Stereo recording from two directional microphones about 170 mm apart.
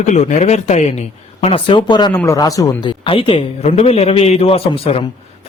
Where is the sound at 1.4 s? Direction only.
30° left (ahead or behind).